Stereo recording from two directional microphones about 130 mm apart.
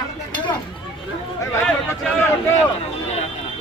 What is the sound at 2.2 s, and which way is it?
Speech, 20° left (ahead or behind).